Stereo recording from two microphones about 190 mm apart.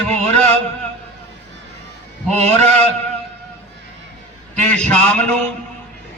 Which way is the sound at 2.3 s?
35° right (ahead or behind).